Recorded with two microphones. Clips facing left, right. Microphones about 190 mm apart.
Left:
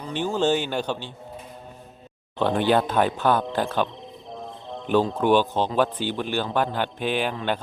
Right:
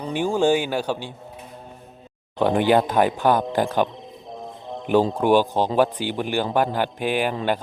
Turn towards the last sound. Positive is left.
turn(degrees=-10)  # may be behind; listen again after turning